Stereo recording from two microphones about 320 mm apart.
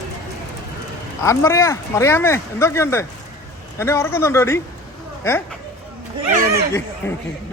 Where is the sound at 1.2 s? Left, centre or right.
Centre.